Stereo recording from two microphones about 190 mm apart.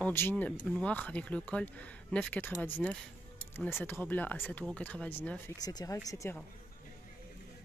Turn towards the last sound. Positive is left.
turn(degrees=15)  # may be behind; listen again after turning